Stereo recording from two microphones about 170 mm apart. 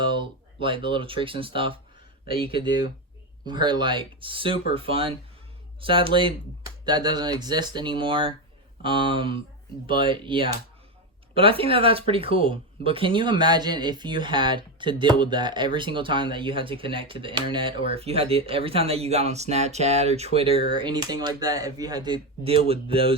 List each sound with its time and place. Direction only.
0.0 s speech: 30° right (ahead or behind)